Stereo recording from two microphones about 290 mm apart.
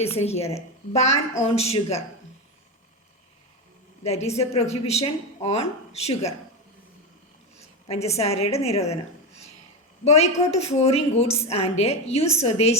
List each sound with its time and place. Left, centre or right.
0.2 s a woman's voice: left
4.0 s a woman's voice: left
7.9 s a woman's voice: left
10.0 s a woman's voice: left